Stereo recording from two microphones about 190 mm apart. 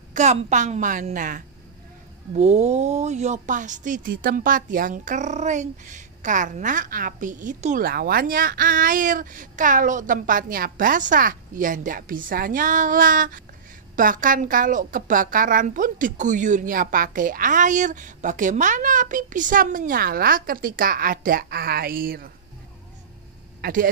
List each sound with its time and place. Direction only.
0.1 s a woman's voice: 40° right (ahead or behind)
2.3 s speech: 35° right (ahead or behind); by 22.3 s 50° right (ahead or behind)
23.6 s speech: 45° right (ahead or behind)